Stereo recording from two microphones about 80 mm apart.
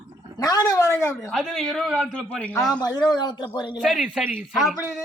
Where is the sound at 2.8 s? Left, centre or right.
Left.